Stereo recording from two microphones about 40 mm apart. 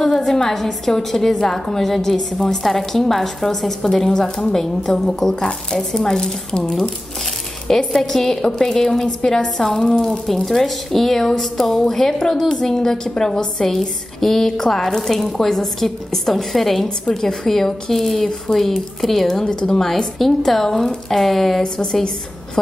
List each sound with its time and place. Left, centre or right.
0.0 s a woman's voice: centre
19.8 s a woman's voice: centre